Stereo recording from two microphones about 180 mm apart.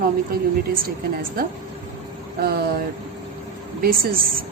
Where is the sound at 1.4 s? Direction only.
55° right (ahead or behind).